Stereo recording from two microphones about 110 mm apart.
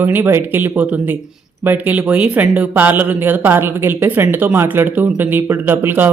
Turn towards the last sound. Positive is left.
turn(degrees=-20)  # may be behind; listen again after turning